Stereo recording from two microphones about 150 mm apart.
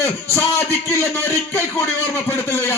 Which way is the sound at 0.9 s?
15° left (ahead or behind).